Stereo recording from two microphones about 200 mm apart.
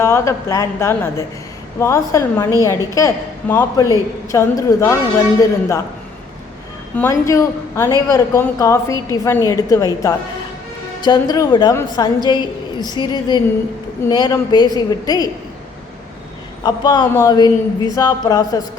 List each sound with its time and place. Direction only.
0.0 s a woman's voice: 15° left (ahead or behind)
6.9 s a woman's voice: 15° left (ahead or behind)
16.6 s a woman's voice: 20° left (ahead or behind)